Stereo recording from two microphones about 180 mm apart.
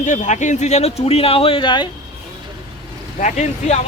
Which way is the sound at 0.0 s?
45° left (ahead or behind).